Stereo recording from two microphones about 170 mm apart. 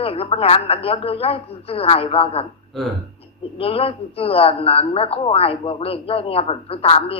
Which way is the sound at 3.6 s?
35° left (ahead or behind).